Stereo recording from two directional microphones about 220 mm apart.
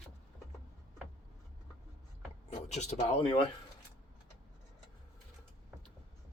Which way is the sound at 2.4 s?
30° left (ahead or behind).